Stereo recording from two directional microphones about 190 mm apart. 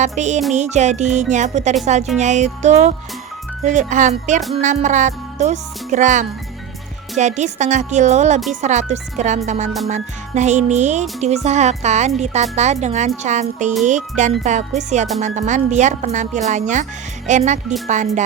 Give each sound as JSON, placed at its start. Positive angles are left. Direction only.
{"t": 0.0, "sound": "music", "side_deg": -40}